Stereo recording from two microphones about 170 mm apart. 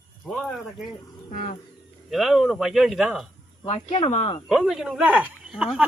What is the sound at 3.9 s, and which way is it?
Speech, 35° left (ahead or behind).